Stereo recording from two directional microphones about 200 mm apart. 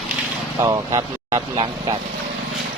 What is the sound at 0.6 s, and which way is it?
Speech, 15° right (ahead or behind).